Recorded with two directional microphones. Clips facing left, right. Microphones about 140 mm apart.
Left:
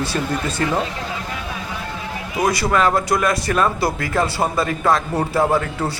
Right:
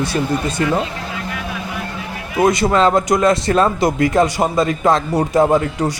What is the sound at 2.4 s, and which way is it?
Speech, 20° right (ahead or behind).